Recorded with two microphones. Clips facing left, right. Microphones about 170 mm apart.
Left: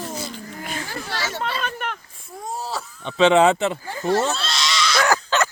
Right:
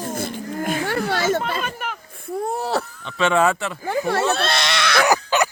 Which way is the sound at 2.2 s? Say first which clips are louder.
Right 7 dB; 60° right (ahead or behind).